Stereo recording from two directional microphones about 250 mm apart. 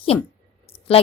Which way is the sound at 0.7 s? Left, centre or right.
Left.